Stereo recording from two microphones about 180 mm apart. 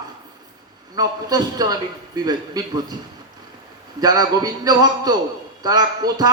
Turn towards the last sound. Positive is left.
turn(degrees=-20)  # may be behind; listen again after turning